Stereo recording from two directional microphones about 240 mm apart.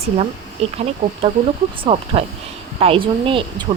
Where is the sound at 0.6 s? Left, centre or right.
Right.